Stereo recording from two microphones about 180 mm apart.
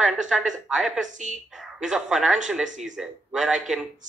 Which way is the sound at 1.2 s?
40° right (ahead or behind).